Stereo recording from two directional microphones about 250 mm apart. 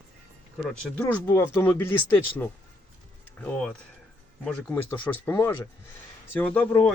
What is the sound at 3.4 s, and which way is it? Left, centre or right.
A man's voice, centre.